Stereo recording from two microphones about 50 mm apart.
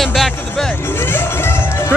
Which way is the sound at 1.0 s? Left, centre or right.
Left.